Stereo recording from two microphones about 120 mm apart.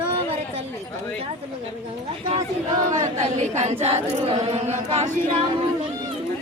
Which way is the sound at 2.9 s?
75° right (ahead or behind).